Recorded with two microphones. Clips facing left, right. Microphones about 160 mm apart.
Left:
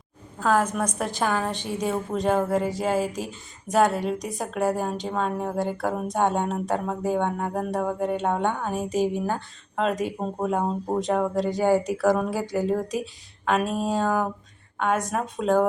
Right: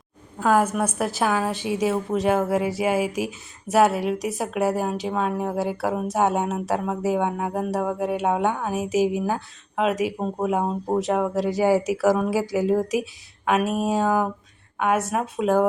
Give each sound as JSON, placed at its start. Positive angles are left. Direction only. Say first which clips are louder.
{"t": 0.3, "sound": "a woman's voice", "louder": "right 2 dB", "side_deg": -10}